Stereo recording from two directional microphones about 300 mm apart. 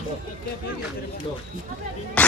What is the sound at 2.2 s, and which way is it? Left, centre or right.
Music, centre.